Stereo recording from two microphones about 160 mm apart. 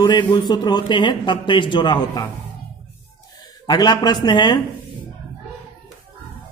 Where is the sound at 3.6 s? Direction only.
25° left (ahead or behind).